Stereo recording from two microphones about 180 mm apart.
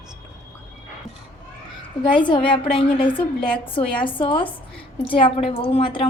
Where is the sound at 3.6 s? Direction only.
30° left (ahead or behind).